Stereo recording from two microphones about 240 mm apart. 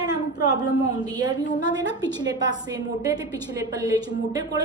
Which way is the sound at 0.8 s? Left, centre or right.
Centre.